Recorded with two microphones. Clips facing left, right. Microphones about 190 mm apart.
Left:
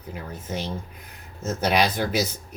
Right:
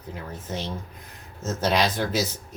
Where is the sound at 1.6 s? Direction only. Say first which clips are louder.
Left 1 dB; 15° left (ahead or behind).